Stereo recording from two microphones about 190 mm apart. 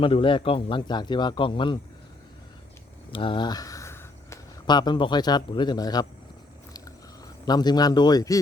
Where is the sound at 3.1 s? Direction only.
25° left (ahead or behind).